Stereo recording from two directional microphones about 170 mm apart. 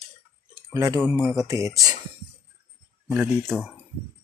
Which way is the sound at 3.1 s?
10° right (ahead or behind).